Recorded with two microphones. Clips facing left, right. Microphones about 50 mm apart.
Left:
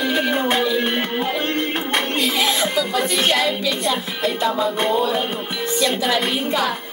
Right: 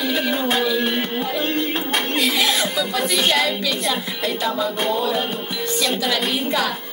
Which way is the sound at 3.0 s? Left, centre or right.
Left.